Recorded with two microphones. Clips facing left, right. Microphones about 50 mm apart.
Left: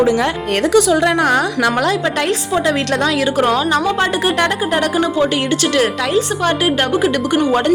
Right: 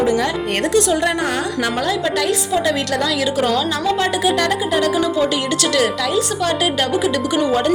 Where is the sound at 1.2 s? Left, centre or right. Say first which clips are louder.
Left 6 dB; left.